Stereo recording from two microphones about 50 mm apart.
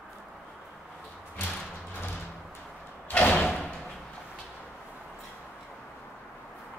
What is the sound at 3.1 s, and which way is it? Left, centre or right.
Slam, left.